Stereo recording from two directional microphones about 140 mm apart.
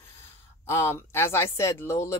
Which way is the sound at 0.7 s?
20° left (ahead or behind).